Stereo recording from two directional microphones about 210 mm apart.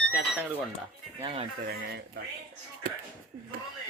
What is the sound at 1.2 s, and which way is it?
Speech, 25° right (ahead or behind).